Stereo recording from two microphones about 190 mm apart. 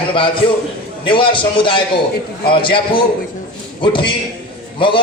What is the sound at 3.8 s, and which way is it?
A man's voice, 25° left (ahead or behind).